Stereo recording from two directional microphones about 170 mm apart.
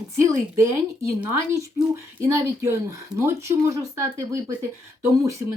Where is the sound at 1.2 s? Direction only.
15° right (ahead or behind).